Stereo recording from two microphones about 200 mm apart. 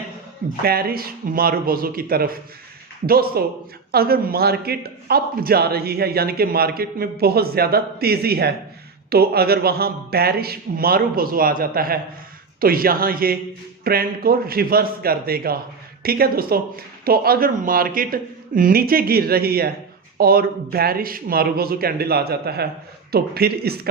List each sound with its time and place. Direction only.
0.6 s a man's voice: 50° right (ahead or behind)